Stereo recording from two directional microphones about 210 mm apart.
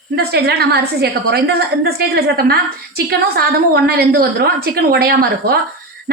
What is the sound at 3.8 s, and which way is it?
A woman's voice, 45° right (ahead or behind).